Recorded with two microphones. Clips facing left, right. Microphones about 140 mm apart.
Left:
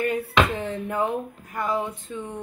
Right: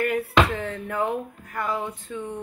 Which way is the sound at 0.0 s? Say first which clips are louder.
Right 1 dB; 25° left (ahead or behind).